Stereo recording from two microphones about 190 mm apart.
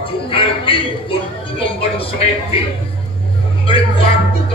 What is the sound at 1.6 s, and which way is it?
Music, 30° left (ahead or behind).